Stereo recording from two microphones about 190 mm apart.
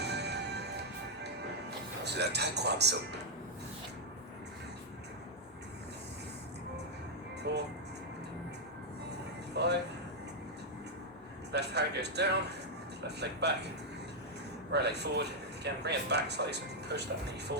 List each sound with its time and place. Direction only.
0.0 s music: 60° right (ahead or behind)
2.0 s speech: 60° right (ahead or behind)
7.5 s music: 60° right (ahead or behind)
9.6 s a sound: 65° right (ahead or behind)
11.5 s speech: 60° right (ahead or behind)
14.7 s speech: 60° right (ahead or behind)